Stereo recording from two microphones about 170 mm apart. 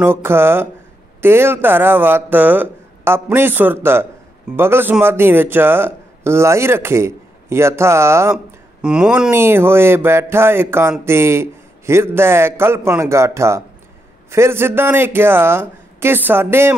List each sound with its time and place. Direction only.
0.0 s speech: 15° right (ahead or behind)